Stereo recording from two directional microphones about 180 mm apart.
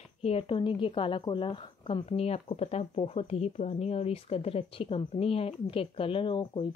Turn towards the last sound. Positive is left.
turn(degrees=30)  # may be behind; listen again after turning